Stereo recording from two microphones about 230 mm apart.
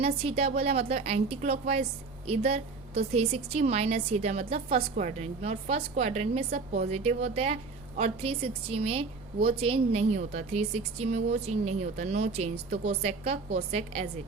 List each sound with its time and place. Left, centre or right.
0.0 s a woman's voice: right